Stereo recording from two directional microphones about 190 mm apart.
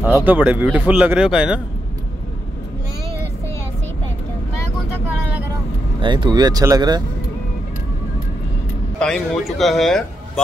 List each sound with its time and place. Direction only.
0.0 s a man's voice: 10° right (ahead or behind)
5.9 s speech: 25° right (ahead or behind)
9.0 s a man's voice: centre (ahead or behind)